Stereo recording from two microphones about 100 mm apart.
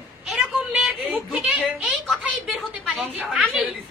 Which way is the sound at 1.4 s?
15° right (ahead or behind).